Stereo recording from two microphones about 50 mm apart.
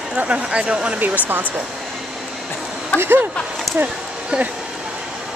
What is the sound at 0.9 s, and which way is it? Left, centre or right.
Speech, right.